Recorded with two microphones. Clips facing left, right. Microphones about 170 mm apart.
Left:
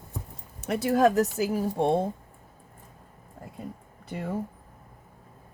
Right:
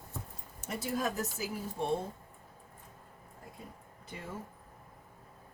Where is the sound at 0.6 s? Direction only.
75° left (ahead or behind).